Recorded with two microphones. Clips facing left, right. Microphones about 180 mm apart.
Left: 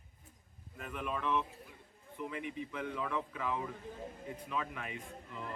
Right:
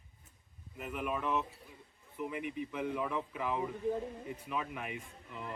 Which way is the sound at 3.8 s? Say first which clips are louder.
Right 14 dB; 55° right (ahead or behind).